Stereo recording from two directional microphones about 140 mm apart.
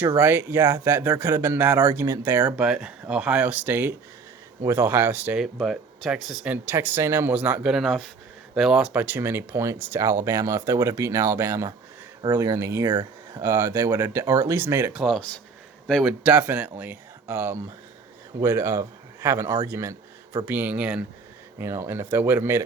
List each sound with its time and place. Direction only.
0.2 s speech: 15° right (ahead or behind)
14.9 s speech: centre (ahead or behind); by 22.6 s 15° right (ahead or behind)